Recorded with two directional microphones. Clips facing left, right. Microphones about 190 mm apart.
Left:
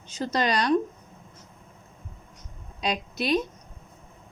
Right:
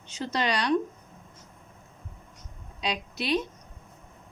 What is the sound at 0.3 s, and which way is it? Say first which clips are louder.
Speech: left 3 dB; 45° left (ahead or behind).